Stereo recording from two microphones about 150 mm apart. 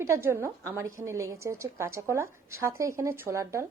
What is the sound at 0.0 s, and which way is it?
A woman's voice, 20° right (ahead or behind).